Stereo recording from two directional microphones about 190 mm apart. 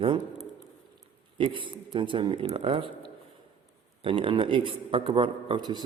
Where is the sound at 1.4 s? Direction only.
25° right (ahead or behind).